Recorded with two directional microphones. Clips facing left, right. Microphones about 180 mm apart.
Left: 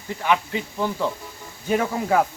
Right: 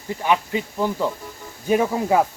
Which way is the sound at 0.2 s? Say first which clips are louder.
Right 1 dB; 15° right (ahead or behind).